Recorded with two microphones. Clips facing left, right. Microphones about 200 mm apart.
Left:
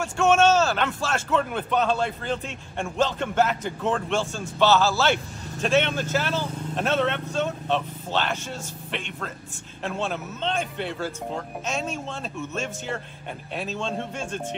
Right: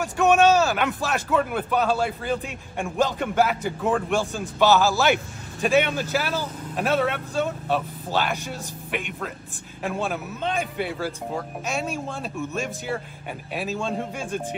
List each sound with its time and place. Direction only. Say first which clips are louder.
0.0 s a man's voice: right 1 dB; 15° right (ahead or behind)